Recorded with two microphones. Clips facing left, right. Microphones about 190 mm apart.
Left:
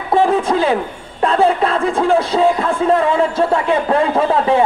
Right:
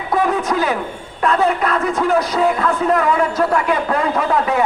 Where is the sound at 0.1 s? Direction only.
30° left (ahead or behind).